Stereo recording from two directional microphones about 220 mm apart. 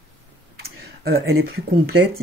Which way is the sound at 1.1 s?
50° right (ahead or behind).